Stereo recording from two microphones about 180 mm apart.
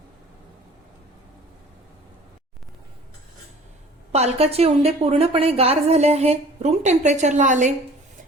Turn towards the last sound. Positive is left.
turn(degrees=-45)  # may be behind; listen again after turning